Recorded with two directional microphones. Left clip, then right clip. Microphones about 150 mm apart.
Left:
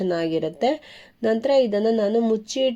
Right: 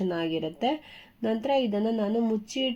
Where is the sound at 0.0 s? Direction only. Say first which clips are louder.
Left 6 dB; 25° left (ahead or behind).